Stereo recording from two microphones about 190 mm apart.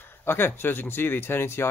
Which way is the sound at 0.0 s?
10° left (ahead or behind).